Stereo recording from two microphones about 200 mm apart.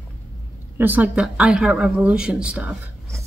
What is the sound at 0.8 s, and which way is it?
Speech, 10° right (ahead or behind).